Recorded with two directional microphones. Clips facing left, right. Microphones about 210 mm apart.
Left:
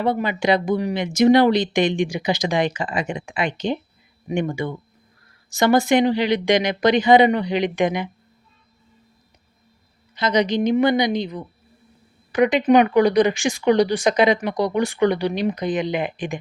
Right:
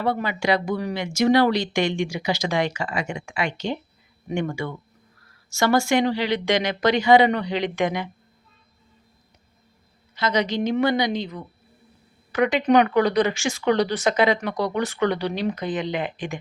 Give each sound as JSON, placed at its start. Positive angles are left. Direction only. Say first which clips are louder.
{"t": 0.0, "sound": "speech", "louder": "left 3 dB", "side_deg": 20}
{"t": 10.2, "sound": "speech", "louder": "left 4 dB", "side_deg": 15}